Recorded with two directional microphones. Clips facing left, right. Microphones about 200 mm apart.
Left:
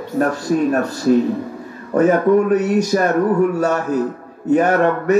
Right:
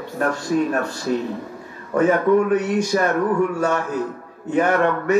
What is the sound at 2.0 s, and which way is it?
Speech, 40° left (ahead or behind).